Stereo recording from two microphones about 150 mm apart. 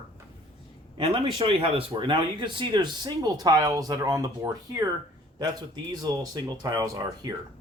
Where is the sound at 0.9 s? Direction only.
35° right (ahead or behind).